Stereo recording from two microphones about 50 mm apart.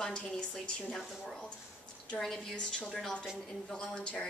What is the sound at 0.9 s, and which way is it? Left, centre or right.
A woman's voice, centre.